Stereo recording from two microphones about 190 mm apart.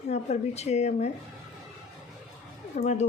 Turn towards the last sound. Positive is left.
turn(degrees=40)  # may be behind; listen again after turning